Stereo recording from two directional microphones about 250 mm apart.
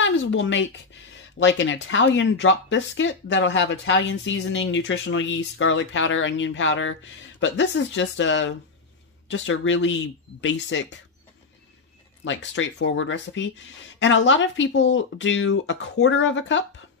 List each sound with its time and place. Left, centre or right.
0.0 s speech: left
12.3 s speech: left